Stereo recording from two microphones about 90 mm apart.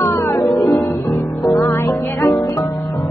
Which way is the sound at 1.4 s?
40° left (ahead or behind).